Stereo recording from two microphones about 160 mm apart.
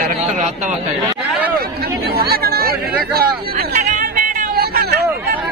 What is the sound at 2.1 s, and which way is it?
Speech, 75° right (ahead or behind).